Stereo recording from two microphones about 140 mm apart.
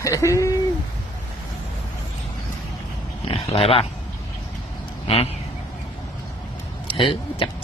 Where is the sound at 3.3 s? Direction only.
45° left (ahead or behind).